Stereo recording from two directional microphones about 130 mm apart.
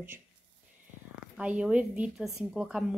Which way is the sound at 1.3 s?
10° right (ahead or behind).